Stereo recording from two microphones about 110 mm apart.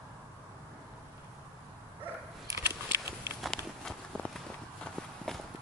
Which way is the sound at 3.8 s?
5° left (ahead or behind).